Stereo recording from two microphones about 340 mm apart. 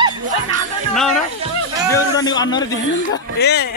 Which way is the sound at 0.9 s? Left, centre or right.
Centre.